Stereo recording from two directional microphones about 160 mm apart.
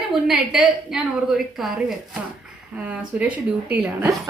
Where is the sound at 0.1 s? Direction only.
5° right (ahead or behind).